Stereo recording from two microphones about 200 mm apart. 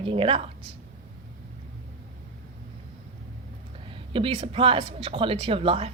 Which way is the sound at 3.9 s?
25° right (ahead or behind).